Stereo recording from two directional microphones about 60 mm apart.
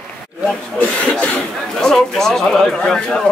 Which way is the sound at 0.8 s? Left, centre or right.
Left.